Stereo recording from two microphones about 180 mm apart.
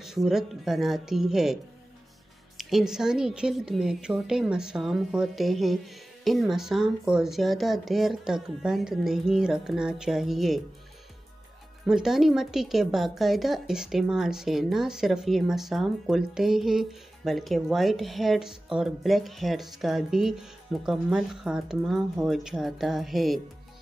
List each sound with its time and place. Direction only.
0.0 s a woman's voice: centre (ahead or behind)
11.8 s a woman's voice: centre (ahead or behind)